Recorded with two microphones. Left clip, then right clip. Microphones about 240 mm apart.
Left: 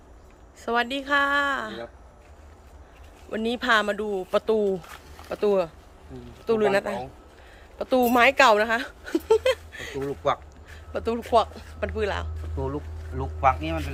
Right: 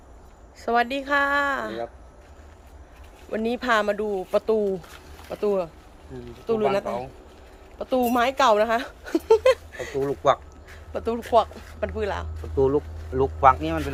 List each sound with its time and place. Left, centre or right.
0.6 s speech: centre
3.3 s speech: centre
10.2 s speech: right
10.9 s speech: centre
12.5 s speech: right